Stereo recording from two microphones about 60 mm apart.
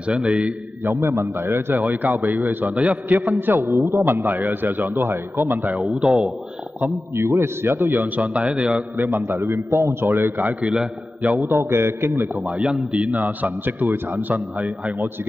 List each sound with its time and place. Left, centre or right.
0.1 s a man's voice: centre
0.8 s a man's voice: right
1.8 s a man's voice: right
5.8 s a man's voice: centre
7.2 s a man's voice: right
8.2 s a man's voice: centre
8.9 s a man's voice: right
10.0 s a man's voice: right
10.6 s a man's voice: centre
11.4 s a man's voice: right
12.4 s a man's voice: centre
13.2 s a man's voice: right